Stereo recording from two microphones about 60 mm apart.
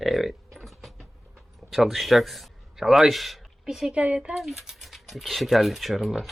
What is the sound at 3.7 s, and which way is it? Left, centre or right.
Speech, centre.